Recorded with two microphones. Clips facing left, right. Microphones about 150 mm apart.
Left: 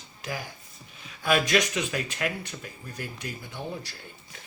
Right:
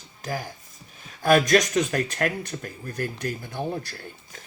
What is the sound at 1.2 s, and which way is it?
Speech, 45° right (ahead or behind).